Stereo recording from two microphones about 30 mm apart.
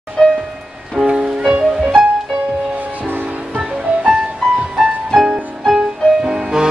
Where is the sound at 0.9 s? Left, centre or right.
Right.